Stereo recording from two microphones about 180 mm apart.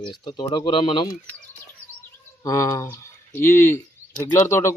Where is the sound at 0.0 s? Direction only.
25° left (ahead or behind).